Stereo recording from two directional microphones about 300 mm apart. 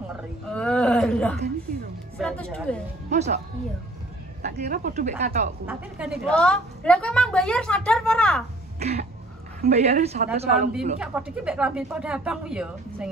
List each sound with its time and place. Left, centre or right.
0.5 s a sound: centre
2.1 s speech: centre
3.1 s speech: right
4.4 s speech: right
5.7 s a woman's voice: centre
8.7 s cough: right
9.6 s speech: right
11.0 s a woman's voice: centre